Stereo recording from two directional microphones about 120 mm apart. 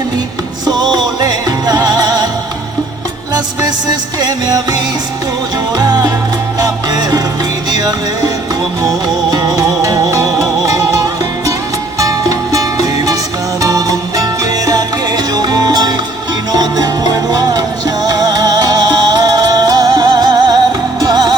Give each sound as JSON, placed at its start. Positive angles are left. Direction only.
{"t": 0.6, "sound": "music", "side_deg": -35}
{"t": 4.2, "sound": "music", "side_deg": -35}
{"t": 9.3, "sound": "music", "side_deg": -35}